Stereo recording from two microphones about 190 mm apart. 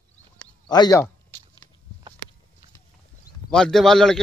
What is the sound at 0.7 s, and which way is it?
Speech, 20° left (ahead or behind).